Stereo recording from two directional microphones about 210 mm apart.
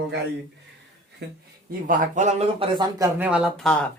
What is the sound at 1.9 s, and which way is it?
Speech, 35° right (ahead or behind).